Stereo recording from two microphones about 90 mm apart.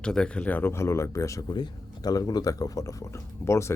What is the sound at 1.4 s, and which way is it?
Speech, 55° left (ahead or behind).